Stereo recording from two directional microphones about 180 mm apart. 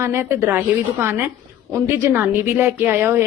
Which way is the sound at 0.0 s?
15° right (ahead or behind).